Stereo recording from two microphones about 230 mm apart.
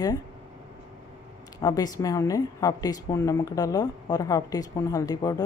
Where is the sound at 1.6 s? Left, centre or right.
Centre.